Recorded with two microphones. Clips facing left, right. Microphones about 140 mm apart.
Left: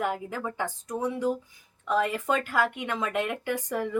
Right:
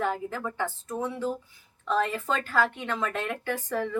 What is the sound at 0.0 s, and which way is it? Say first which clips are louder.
A woman's voice: even; 15° left (ahead or behind).